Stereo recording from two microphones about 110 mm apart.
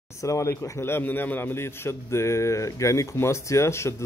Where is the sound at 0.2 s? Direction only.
30° left (ahead or behind).